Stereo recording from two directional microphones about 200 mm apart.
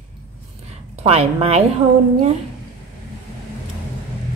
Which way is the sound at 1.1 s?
30° right (ahead or behind).